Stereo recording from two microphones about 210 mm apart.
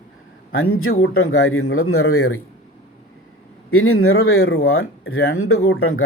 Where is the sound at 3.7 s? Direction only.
85° left.